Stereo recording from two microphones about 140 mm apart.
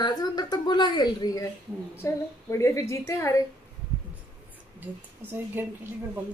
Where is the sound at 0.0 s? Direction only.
30° left (ahead or behind).